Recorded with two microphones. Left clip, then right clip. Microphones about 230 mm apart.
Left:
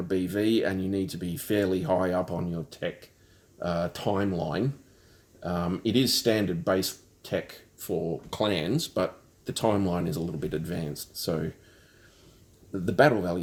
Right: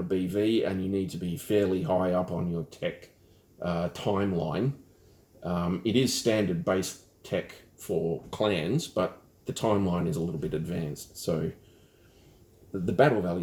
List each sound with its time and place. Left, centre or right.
0.1 s speech: left
12.8 s speech: left